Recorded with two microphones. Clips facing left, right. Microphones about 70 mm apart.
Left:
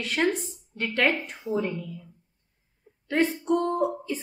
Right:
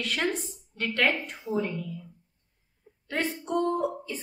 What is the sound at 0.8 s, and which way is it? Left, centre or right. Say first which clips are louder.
Speech: left 2 dB; centre.